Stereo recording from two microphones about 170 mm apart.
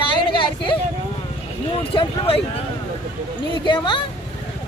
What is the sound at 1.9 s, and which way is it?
Speech, 30° left (ahead or behind).